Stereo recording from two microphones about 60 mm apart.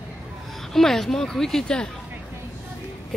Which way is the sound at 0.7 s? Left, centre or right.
Centre.